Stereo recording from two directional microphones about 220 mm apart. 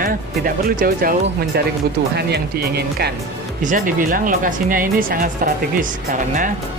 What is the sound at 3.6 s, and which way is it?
Speech, 35° right (ahead or behind).